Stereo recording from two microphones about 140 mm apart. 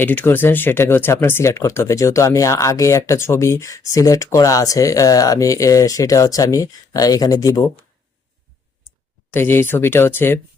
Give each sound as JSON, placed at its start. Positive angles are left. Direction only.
{"t": 0.0, "sound": "speech", "side_deg": 15}
{"t": 9.3, "sound": "speech", "side_deg": 15}